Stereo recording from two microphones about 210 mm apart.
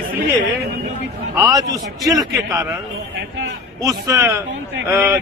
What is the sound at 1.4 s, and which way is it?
A man's voice, 15° right (ahead or behind).